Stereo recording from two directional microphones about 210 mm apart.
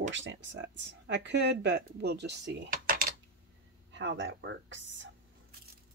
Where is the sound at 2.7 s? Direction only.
45° right (ahead or behind).